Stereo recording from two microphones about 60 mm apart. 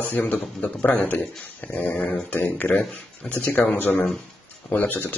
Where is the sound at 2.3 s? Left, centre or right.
Left.